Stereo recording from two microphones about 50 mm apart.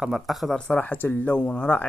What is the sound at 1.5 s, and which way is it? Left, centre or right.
Speech, left.